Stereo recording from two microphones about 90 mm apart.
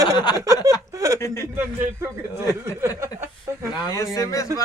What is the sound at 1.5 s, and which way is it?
Speech, 30° right (ahead or behind).